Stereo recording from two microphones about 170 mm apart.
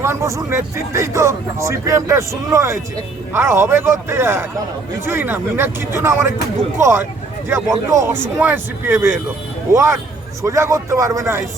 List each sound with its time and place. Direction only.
0.0 s speech: 15° right (ahead or behind)